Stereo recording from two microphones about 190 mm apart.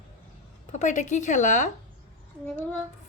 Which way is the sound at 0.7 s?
40° left (ahead or behind).